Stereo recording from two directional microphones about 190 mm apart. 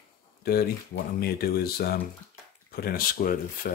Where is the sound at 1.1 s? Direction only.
55° left (ahead or behind).